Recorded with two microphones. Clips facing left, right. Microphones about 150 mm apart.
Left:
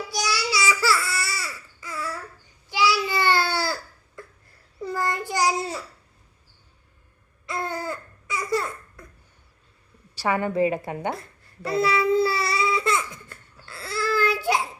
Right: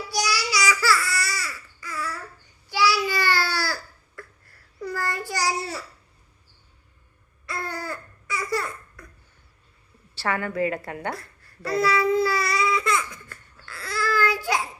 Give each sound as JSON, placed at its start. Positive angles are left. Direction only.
{"t": 0.1, "sound": "babbling", "side_deg": 25}
{"t": 2.6, "sound": "a sound", "side_deg": 20}
{"t": 7.4, "sound": "babbling", "side_deg": 20}
{"t": 10.2, "sound": "babbling", "side_deg": 15}